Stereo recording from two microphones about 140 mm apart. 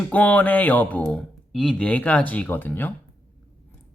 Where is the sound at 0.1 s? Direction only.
10° left (ahead or behind).